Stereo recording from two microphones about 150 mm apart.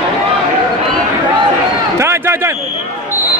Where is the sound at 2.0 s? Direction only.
15° right (ahead or behind).